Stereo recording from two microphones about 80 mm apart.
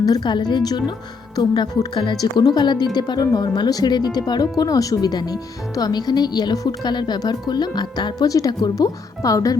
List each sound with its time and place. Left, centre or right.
0.0 s speech: left